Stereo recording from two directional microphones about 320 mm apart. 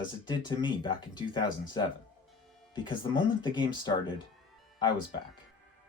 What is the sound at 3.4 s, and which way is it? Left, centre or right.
Speech, centre.